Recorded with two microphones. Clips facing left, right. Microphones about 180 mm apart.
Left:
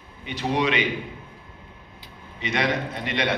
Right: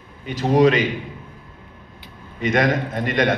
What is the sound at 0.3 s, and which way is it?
Speech, 45° right (ahead or behind).